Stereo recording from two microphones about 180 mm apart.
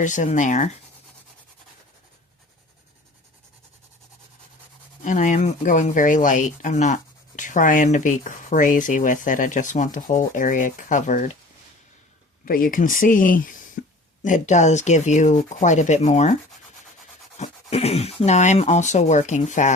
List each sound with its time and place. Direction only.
0.0 s speech: 45° left (ahead or behind)
5.0 s speech: 45° left (ahead or behind)
12.5 s speech: 50° left (ahead or behind)
17.3 s speech: 35° left (ahead or behind)